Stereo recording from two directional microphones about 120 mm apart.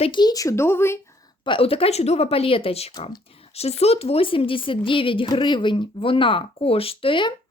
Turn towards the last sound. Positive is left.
turn(degrees=45)  # may be behind; listen again after turning